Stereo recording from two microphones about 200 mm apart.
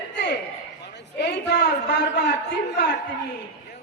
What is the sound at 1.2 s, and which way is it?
A man's voice, 55° left (ahead or behind).